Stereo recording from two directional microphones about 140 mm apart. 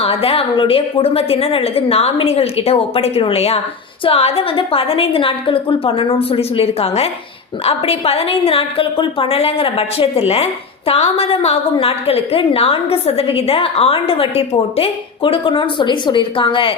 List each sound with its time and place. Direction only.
0.0 s a woman's voice: 45° left (ahead or behind)